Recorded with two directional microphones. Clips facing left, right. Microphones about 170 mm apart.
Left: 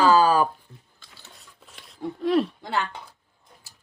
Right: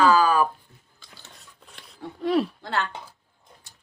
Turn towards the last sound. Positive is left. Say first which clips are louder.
# even
turn(degrees=5)  # may be behind; listen again after turning